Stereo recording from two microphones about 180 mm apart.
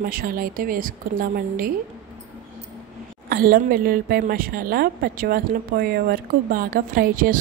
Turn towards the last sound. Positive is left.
turn(degrees=-55)  # may be behind; listen again after turning